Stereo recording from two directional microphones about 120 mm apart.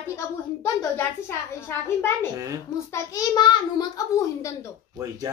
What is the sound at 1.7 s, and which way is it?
Speech, 20° left (ahead or behind).